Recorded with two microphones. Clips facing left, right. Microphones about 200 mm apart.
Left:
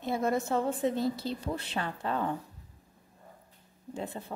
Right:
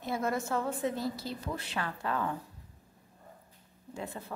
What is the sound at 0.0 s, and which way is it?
A woman's voice, 25° left (ahead or behind).